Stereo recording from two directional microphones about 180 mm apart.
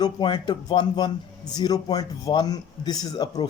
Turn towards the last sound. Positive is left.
turn(degrees=20)  # may be behind; listen again after turning